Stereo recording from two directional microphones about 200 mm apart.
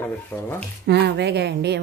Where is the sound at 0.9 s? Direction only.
60° right (ahead or behind).